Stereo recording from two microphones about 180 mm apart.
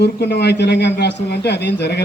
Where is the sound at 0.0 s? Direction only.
65° left (ahead or behind).